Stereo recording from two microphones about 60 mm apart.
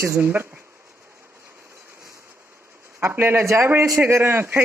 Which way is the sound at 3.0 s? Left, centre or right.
Right.